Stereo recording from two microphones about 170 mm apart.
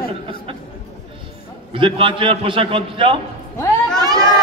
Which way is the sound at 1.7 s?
30° right (ahead or behind).